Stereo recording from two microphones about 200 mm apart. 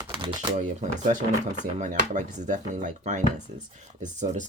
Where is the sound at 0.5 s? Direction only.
40° right (ahead or behind).